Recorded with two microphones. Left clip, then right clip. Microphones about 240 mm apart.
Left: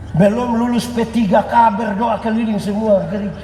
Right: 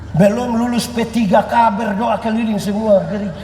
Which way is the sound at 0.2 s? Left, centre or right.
Right.